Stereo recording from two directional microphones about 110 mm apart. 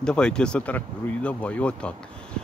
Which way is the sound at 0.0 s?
5° left (ahead or behind).